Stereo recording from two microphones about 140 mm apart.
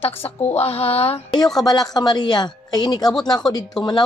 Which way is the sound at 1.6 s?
30° left (ahead or behind).